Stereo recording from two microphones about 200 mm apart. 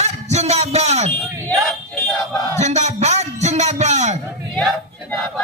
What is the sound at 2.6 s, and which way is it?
A man's voice, 35° right (ahead or behind).